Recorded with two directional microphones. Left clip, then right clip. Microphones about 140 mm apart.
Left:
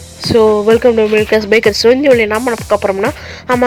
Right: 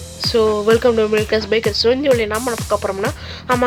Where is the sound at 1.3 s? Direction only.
40° left (ahead or behind).